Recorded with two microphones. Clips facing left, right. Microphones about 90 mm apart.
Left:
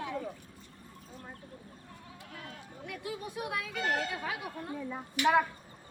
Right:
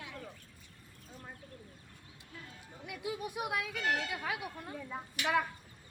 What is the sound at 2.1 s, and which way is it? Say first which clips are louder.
Sheep: left 4 dB; 75° left (ahead or behind).